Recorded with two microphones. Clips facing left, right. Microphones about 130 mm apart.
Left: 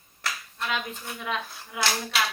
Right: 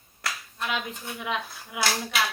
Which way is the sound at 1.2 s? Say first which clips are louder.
Right 1 dB; 15° right (ahead or behind).